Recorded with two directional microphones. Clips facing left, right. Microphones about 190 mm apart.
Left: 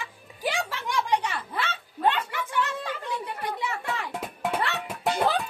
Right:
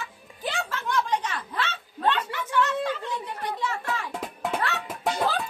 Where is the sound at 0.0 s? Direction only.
10° left (ahead or behind).